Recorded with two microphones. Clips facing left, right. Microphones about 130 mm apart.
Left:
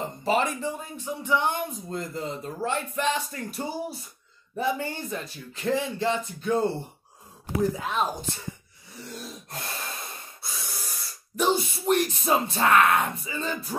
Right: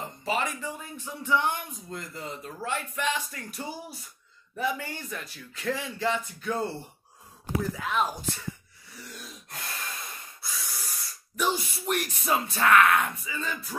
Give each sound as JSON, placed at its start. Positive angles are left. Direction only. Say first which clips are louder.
{"t": 0.2, "sound": "speech", "louder": "left 5 dB", "side_deg": 35}
{"t": 1.9, "sound": "speech", "louder": "left 6 dB", "side_deg": 30}
{"t": 7.7, "sound": "speech", "louder": "left 1 dB", "side_deg": 25}
{"t": 8.9, "sound": "a sound", "louder": "left 6 dB", "side_deg": 30}
{"t": 11.3, "sound": "speech", "louder": "left 4 dB", "side_deg": 25}